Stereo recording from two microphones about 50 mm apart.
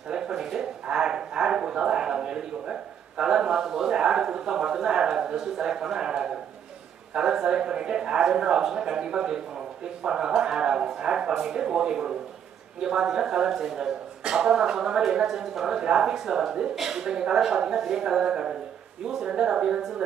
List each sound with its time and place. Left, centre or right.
0.1 s speech: centre